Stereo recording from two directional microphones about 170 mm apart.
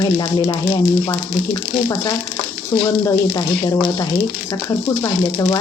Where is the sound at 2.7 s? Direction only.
15° left (ahead or behind).